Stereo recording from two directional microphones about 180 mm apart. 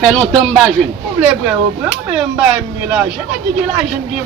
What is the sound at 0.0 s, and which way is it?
Speech, centre (ahead or behind).